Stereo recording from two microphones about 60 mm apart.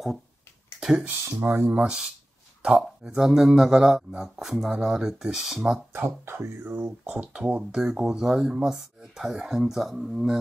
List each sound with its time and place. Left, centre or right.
0.7 s a sound: centre
1.2 s speech: right
1.7 s speech: right
3.0 s speech: centre
5.9 s speech: right
6.7 s speech: right; by 10.4 s centre